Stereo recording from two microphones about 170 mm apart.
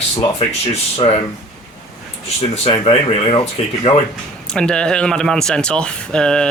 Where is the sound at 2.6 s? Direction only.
35° left (ahead or behind).